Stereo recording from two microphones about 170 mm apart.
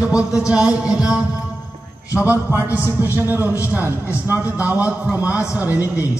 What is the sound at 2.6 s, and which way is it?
Speech, 10° right (ahead or behind).